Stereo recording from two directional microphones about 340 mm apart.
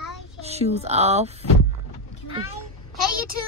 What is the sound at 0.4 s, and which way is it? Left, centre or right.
Speech, centre.